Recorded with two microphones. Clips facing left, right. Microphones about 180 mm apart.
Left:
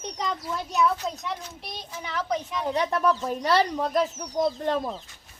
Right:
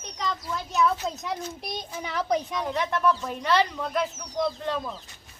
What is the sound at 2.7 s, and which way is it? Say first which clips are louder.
Speech: left 2 dB; 35° left (ahead or behind).